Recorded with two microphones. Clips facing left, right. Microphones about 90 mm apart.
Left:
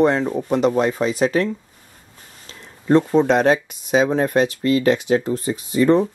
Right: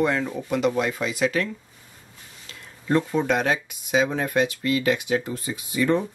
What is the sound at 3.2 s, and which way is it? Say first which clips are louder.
Speech: left 7 dB; 35° left (ahead or behind).